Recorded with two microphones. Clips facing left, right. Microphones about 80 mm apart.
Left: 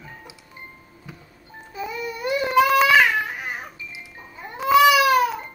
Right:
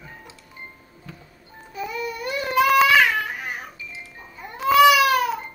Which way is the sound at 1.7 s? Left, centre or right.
Left.